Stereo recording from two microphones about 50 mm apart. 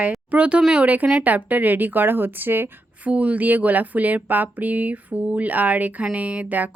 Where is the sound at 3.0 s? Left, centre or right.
Right.